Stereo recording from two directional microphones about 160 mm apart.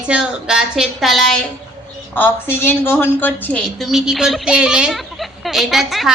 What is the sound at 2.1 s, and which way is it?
A woman's voice, 10° left (ahead or behind).